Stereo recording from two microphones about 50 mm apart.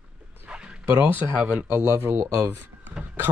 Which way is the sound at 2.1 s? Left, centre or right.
Right.